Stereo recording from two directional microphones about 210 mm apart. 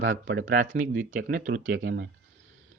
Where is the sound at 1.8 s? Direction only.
60° right (ahead or behind).